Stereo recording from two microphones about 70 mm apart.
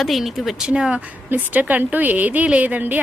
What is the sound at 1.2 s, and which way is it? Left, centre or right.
A woman's voice, right.